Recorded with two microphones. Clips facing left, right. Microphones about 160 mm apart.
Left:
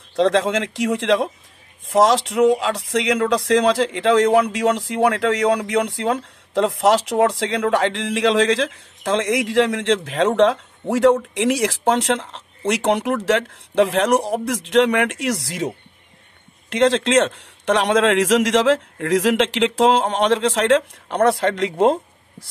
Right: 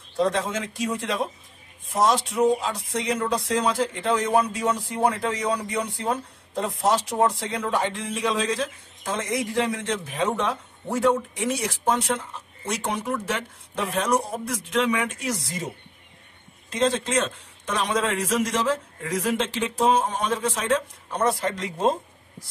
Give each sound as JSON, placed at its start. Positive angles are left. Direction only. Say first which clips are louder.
{"t": 0.1, "sound": "speech", "louder": "left 7 dB", "side_deg": 85}